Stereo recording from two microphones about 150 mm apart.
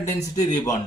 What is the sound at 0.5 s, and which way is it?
Speech, 25° left (ahead or behind).